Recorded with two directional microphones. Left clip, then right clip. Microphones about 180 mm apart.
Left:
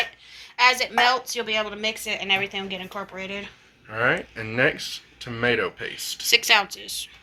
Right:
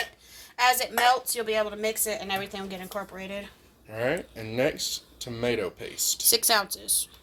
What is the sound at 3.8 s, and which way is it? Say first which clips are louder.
Speech: left 6 dB; 10° right (ahead or behind).